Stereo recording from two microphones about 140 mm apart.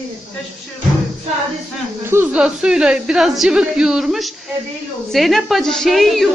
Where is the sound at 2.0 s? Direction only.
15° right (ahead or behind).